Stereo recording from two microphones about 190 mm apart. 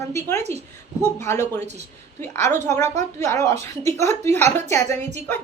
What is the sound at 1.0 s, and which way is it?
A woman's voice, 10° left (ahead or behind).